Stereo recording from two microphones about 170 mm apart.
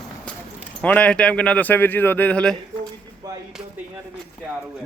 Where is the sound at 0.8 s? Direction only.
10° left (ahead or behind).